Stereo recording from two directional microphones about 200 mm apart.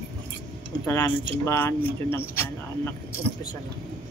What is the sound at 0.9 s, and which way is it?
Speech, 15° left (ahead or behind).